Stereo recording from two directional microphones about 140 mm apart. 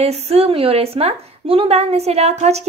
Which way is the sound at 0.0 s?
45° right (ahead or behind).